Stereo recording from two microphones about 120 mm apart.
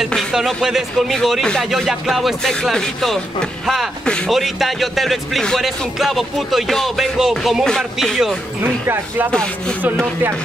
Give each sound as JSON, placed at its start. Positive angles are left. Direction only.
{"t": 0.0, "sound": "a man's voice", "side_deg": 0}
{"t": 8.8, "sound": "speech", "side_deg": -20}
{"t": 9.3, "sound": "speech", "side_deg": 10}